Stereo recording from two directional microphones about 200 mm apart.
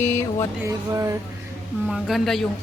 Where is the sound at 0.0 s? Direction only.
10° left (ahead or behind).